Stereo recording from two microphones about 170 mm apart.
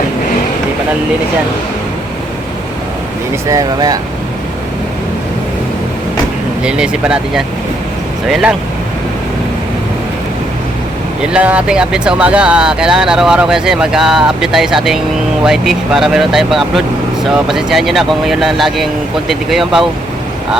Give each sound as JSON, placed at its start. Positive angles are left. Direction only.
{"t": 3.5, "sound": "speech", "side_deg": -20}
{"t": 6.6, "sound": "speech", "side_deg": -5}
{"t": 11.2, "sound": "speech", "side_deg": -5}